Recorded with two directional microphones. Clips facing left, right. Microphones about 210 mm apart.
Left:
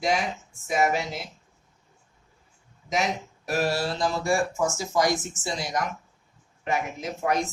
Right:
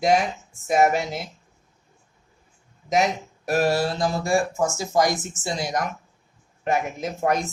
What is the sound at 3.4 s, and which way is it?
Speech, 45° right (ahead or behind).